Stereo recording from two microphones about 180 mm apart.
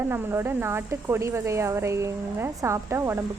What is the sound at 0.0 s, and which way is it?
A woman's voice, 10° right (ahead or behind).